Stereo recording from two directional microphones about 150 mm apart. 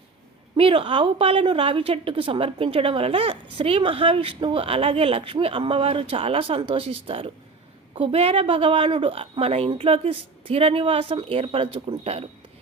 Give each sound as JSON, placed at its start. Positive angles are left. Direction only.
{"t": 0.5, "sound": "a woman's voice", "side_deg": -35}